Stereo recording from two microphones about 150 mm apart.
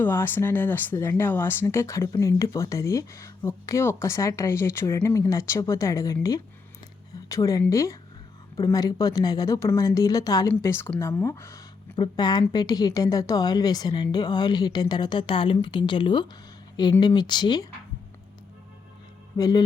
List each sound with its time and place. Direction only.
0.0 s speech: 15° left (ahead or behind)
7.3 s a woman's voice: 20° left (ahead or behind)
19.4 s speech: 25° left (ahead or behind)